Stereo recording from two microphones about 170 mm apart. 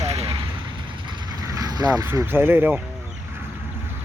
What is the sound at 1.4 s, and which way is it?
Speech, 20° right (ahead or behind).